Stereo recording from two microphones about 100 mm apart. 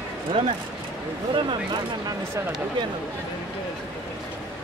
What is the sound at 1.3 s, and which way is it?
Speech, 55° right (ahead or behind).